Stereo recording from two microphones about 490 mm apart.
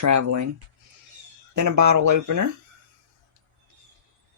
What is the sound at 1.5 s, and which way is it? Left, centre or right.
Speech, right.